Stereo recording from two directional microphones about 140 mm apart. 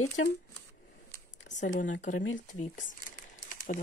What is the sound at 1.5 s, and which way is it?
Speech, 65° left (ahead or behind).